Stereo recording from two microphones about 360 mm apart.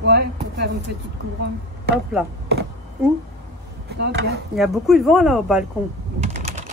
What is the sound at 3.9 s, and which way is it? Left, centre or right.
Speech, right.